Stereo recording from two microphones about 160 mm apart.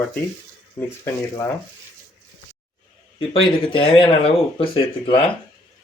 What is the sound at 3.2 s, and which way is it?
Speech, 35° left (ahead or behind).